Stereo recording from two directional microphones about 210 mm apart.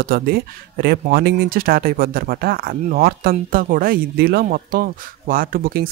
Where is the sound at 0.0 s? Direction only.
45° right (ahead or behind).